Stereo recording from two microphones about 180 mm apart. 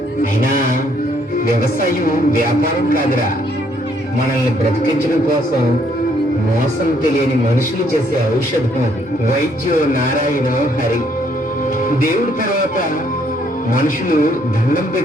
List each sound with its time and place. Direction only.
1.5 s speech: 55° left (ahead or behind)
9.9 s speech: 50° left (ahead or behind)
13.7 s speech: 50° left (ahead or behind)